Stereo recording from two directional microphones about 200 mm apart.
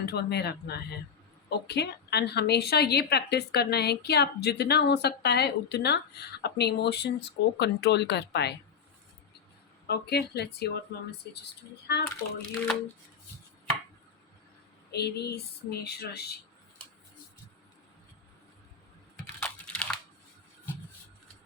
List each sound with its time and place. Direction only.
0.0 s a woman's voice: 55° left (ahead or behind)
9.8 s a woman's voice: 55° left (ahead or behind)
14.8 s speech: 55° left (ahead or behind)
19.4 s crumpling: 5° left (ahead or behind)